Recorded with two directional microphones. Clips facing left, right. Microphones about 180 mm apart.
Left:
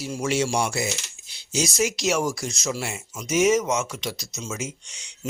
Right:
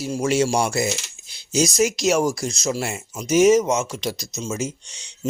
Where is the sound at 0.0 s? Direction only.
40° right (ahead or behind).